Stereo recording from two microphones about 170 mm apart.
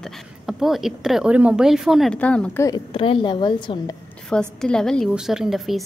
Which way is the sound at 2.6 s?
25° left (ahead or behind).